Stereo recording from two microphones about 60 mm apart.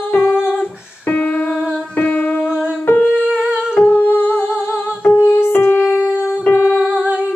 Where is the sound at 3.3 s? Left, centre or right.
Centre.